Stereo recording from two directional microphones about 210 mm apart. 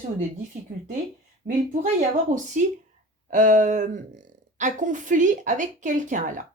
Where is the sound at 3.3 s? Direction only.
35° right (ahead or behind).